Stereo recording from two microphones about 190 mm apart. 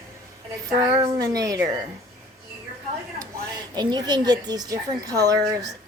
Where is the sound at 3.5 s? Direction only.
20° right (ahead or behind).